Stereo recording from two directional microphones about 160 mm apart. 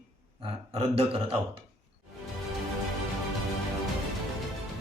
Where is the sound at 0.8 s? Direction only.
35° right (ahead or behind).